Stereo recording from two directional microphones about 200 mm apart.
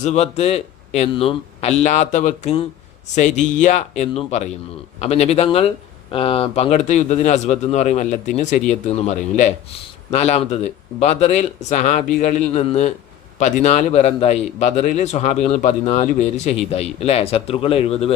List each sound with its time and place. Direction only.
0.0 s a man's voice: 35° left (ahead or behind)